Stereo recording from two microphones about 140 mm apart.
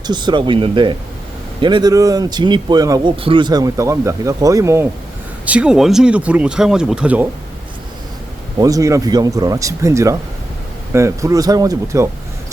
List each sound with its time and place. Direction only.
0.1 s speech: 35° right (ahead or behind)
3.2 s speech: 35° right (ahead or behind); by 4.9 s 20° right (ahead or behind)
5.5 s speech: 5° right (ahead or behind)
8.5 s speech: 25° right (ahead or behind)